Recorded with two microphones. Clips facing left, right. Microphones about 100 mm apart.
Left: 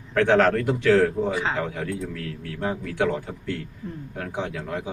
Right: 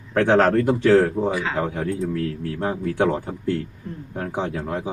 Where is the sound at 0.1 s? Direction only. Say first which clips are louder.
Right 2 dB; 35° right (ahead or behind).